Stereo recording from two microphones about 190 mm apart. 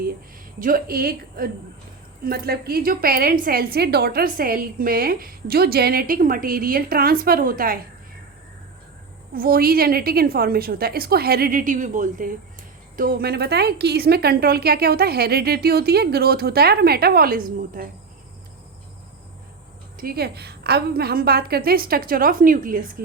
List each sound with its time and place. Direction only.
0.6 s a woman's voice: 50° right (ahead or behind)
9.3 s a woman's voice: 50° right (ahead or behind)
20.0 s a woman's voice: 55° right (ahead or behind)